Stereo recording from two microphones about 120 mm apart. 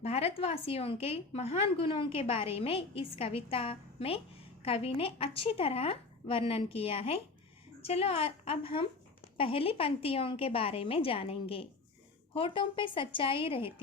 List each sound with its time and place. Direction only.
0.0 s a woman's voice: 60° left (ahead or behind)